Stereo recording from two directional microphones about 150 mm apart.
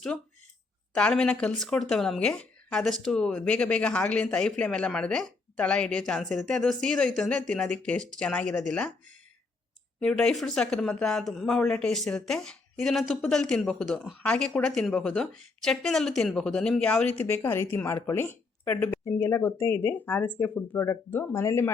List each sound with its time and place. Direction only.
0.9 s speech: 5° left (ahead or behind)
10.0 s speech: 5° left (ahead or behind)